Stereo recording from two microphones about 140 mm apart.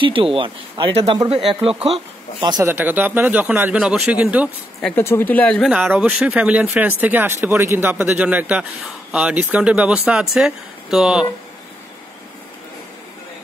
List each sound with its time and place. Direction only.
0.0 s speech: 40° right (ahead or behind)
2.6 s speech: 15° right (ahead or behind)
4.9 s speech: 15° left (ahead or behind)
5.7 s speech: 10° right (ahead or behind)